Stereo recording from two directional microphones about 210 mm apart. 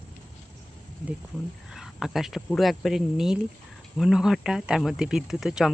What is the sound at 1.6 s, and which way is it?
Speech, centre (ahead or behind).